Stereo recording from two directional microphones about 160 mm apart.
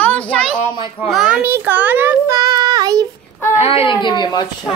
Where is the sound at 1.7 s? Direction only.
10° right (ahead or behind).